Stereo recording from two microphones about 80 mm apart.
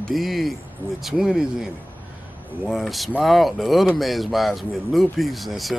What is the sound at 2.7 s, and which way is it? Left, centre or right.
Speech, centre.